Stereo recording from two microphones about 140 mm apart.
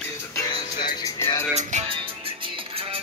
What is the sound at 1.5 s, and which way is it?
Music, 55° right (ahead or behind).